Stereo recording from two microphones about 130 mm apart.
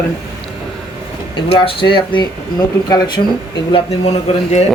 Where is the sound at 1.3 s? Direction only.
40° left (ahead or behind).